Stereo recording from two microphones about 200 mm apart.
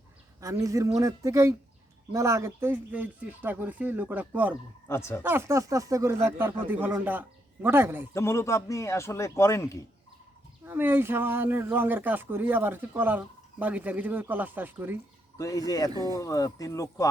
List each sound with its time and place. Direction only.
0.6 s speech: 15° right (ahead or behind)
4.9 s speech: 15° left (ahead or behind)
5.2 s speech: 10° right (ahead or behind)
8.1 s speech: 15° left (ahead or behind)
10.7 s speech: 10° right (ahead or behind)
15.4 s speech: 15° left (ahead or behind)
15.9 s speech: 20° right (ahead or behind)
16.1 s speech: 15° left (ahead or behind)